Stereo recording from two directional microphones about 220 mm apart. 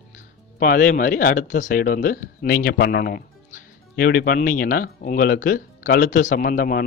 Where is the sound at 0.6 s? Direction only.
40° left (ahead or behind).